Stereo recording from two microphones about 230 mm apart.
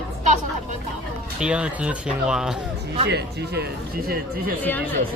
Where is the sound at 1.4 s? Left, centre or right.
Centre.